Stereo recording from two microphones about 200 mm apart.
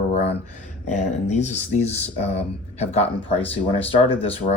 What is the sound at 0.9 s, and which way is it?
Speech, 35° left (ahead or behind).